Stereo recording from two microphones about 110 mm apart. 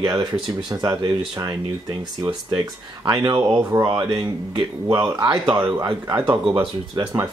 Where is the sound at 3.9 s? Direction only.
40° right (ahead or behind).